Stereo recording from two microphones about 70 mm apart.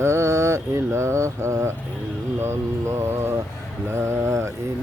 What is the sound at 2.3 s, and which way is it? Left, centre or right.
Speech, right.